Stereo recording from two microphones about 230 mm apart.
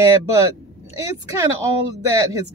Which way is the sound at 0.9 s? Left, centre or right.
Centre.